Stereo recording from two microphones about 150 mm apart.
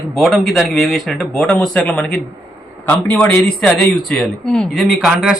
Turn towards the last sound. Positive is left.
turn(degrees=0)  # may be behind; listen again after turning